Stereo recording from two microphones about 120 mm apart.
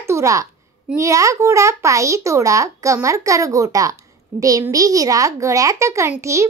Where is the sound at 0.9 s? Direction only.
25° right (ahead or behind).